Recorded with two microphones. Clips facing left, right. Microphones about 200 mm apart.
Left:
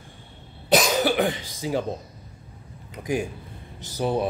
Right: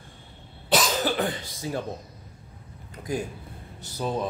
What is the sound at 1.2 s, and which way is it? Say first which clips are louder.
Speech: left 4 dB; 90° left.